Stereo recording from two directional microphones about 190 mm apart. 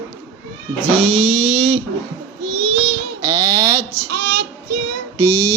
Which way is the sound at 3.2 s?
20° right (ahead or behind).